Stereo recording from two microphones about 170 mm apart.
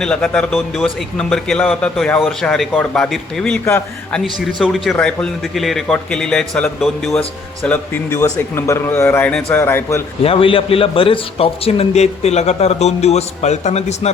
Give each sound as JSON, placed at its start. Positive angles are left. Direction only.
{"t": 0.0, "sound": "a man's voice", "side_deg": 5}
{"t": 10.2, "sound": "a man's voice", "side_deg": 35}